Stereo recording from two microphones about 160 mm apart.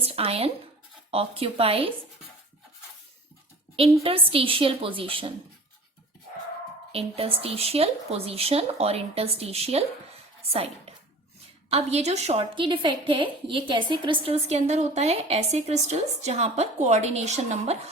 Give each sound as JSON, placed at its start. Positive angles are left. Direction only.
{"t": 0.0, "sound": "a woman's voice", "side_deg": -35}
{"t": 4.0, "sound": "a woman's voice", "side_deg": -35}
{"t": 6.9, "sound": "a woman's voice", "side_deg": -35}